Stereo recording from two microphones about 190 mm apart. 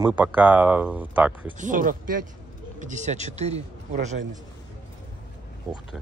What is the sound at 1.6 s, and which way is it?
Speech, 45° right (ahead or behind).